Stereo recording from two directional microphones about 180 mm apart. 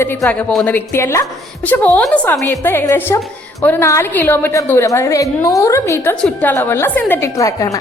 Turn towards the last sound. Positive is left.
turn(degrees=20)  # may be behind; listen again after turning